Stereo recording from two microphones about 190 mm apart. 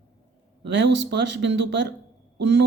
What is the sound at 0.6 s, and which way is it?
Speech, 65° right (ahead or behind).